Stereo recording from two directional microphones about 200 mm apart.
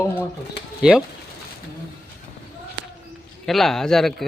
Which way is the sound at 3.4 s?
Centre (ahead or behind).